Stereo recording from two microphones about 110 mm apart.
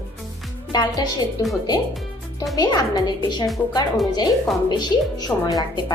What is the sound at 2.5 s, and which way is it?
Speech, 35° left (ahead or behind).